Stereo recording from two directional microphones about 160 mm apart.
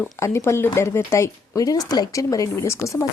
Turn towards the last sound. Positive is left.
turn(degrees=20)  # may be behind; listen again after turning